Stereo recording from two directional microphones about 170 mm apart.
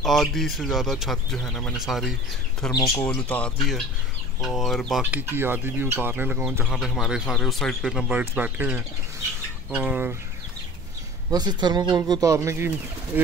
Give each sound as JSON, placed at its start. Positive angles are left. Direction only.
{"t": 0.0, "sound": "speech", "side_deg": 0}
{"t": 5.1, "sound": "speech", "side_deg": -15}
{"t": 11.2, "sound": "speech", "side_deg": -25}